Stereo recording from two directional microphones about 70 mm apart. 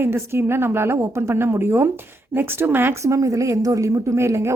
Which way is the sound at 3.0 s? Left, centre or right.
Right.